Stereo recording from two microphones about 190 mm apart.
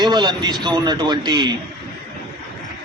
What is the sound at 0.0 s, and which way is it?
A man's voice, 20° right (ahead or behind).